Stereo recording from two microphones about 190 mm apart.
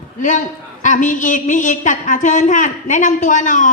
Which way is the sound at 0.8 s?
40° left (ahead or behind).